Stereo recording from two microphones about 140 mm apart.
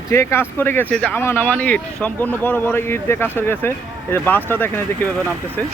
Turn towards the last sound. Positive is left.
turn(degrees=15)  # may be behind; listen again after turning